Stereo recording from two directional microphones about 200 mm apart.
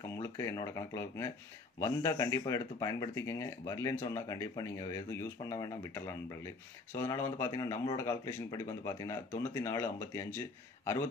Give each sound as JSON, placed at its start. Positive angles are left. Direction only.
{"t": 0.1, "sound": "speech", "side_deg": 15}